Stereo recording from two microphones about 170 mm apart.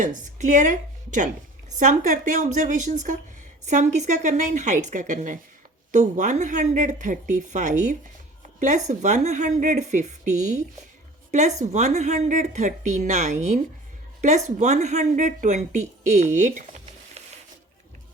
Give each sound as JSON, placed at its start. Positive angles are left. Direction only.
{"t": 0.0, "sound": "speech", "side_deg": -45}